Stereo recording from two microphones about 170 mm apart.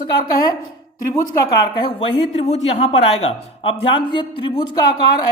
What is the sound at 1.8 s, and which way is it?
A man's voice, 30° left (ahead or behind).